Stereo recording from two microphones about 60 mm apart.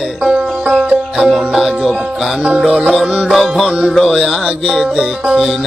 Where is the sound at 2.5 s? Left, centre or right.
Centre.